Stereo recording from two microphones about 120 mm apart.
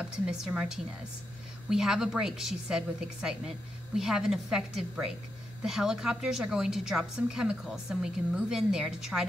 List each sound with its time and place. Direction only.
0.0 s a woman's voice: 5° right (ahead or behind)